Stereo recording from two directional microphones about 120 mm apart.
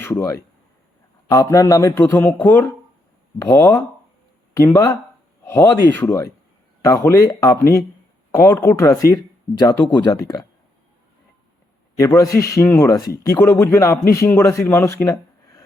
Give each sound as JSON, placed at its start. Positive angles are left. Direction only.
{"t": 0.0, "sound": "a man's voice", "side_deg": 25}
{"t": 5.9, "sound": "speech", "side_deg": 15}
{"t": 6.8, "sound": "a man's voice", "side_deg": 25}
{"t": 11.9, "sound": "a man's voice", "side_deg": 30}
{"t": 12.6, "sound": "speech", "side_deg": 15}
{"t": 12.9, "sound": "a man's voice", "side_deg": 30}
{"t": 13.4, "sound": "a man's voice", "side_deg": 20}